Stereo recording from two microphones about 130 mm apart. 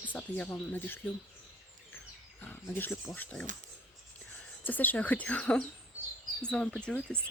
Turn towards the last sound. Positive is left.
turn(degrees=5)  # may be behind; listen again after turning